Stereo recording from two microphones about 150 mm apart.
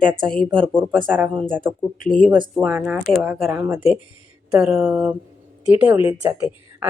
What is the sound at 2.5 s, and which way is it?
Speech, 10° right (ahead or behind).